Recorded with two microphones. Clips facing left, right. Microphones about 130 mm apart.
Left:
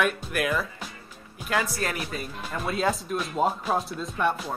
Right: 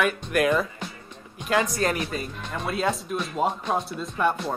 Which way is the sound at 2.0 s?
5° left (ahead or behind).